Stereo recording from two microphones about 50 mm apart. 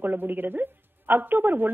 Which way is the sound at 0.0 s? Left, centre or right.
Right.